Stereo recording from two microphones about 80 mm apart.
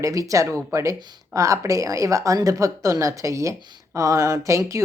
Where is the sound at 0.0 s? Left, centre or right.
Right.